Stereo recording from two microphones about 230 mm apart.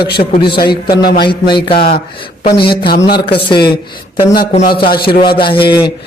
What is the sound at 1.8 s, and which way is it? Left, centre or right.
A man's voice, left.